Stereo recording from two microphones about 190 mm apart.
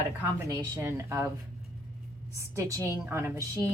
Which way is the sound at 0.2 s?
15° right (ahead or behind).